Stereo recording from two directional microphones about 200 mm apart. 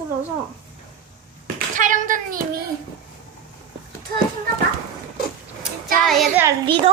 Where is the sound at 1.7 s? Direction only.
40° right (ahead or behind).